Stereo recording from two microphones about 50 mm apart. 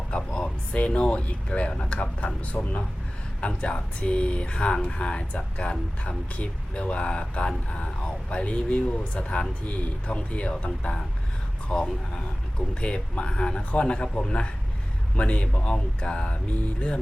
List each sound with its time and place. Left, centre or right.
0.1 s a sound: centre
0.7 s speech: left
11.7 s speech: centre